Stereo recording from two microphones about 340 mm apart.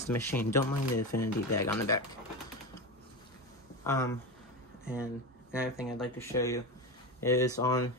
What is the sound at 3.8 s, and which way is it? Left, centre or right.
Speech, centre.